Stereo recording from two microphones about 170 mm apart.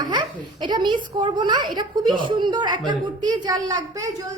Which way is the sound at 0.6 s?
25° right (ahead or behind).